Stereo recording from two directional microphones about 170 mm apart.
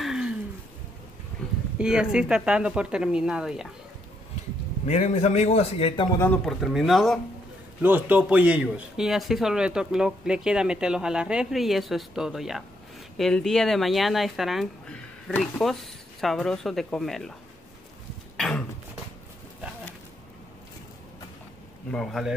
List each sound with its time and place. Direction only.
0.0 s a sound: 5° right (ahead or behind)
1.8 s speech: 5° right (ahead or behind)
4.8 s a man's voice: 40° left (ahead or behind)
6.1 s speech: 10° left (ahead or behind)
6.4 s speech: centre (ahead or behind)
7.8 s speech: 10° right (ahead or behind)
21.9 s speech: centre (ahead or behind)